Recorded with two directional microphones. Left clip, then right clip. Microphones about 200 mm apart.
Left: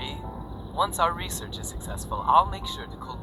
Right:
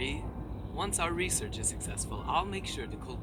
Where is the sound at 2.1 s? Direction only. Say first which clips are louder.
Left 12 dB; 25° right (ahead or behind).